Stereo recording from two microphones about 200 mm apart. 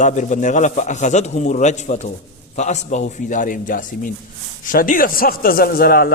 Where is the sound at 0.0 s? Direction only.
35° left (ahead or behind).